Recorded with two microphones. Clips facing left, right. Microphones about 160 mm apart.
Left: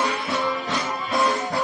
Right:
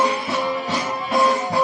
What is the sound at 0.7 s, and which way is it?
Music, 20° right (ahead or behind).